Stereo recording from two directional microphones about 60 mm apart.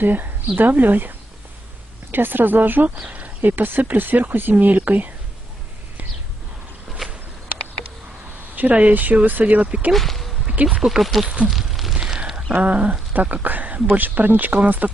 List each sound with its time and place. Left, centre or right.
0.0 s speech: right
2.1 s speech: right
7.0 s a sound: centre
8.5 s speech: right
9.9 s speech: centre
10.5 s speech: right
10.8 s speech: centre
11.3 s a sound: centre
12.6 s speech: right